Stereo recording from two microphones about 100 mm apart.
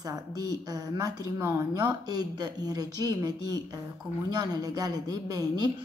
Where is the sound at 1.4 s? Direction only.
25° right (ahead or behind).